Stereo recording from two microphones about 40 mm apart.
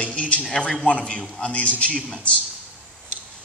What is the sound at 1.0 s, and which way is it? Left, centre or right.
Speech, left.